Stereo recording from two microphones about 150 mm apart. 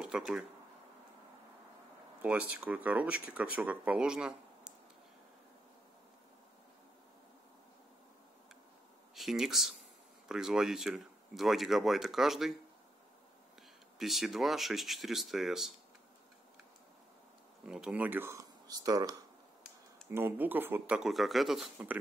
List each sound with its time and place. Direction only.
0.0 s a sound: 5° right (ahead or behind)
2.2 s speech: 10° right (ahead or behind)
9.1 s speech: centre (ahead or behind)
13.9 s speech: centre (ahead or behind)
17.6 s speech: 5° right (ahead or behind)